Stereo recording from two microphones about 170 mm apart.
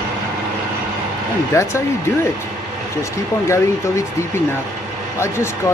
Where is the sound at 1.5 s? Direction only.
15° left (ahead or behind).